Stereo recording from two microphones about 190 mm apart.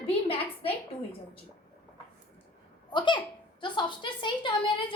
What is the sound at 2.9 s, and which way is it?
A child's voice, 25° left (ahead or behind).